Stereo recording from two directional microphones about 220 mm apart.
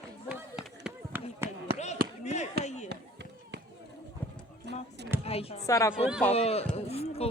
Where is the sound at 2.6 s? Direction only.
30° left (ahead or behind).